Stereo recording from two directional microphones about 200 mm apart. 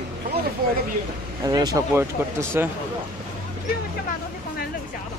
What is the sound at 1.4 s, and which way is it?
Speech, 20° right (ahead or behind).